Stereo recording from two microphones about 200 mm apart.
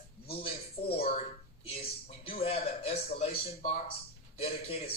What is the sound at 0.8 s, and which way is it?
Speech, 30° left (ahead or behind).